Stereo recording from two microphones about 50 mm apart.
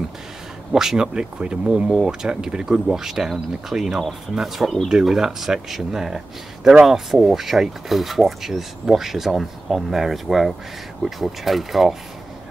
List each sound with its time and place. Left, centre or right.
0.7 s speech: centre